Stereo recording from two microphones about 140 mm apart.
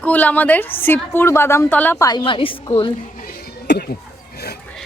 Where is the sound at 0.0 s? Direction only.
10° left (ahead or behind).